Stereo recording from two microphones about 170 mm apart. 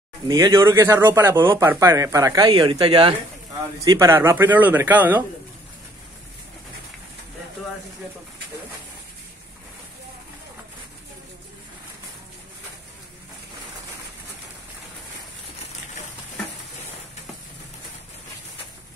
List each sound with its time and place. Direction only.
0.3 s a man's voice: 20° right (ahead or behind)